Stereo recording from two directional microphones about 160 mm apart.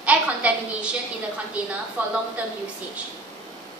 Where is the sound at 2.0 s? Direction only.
10° right (ahead or behind).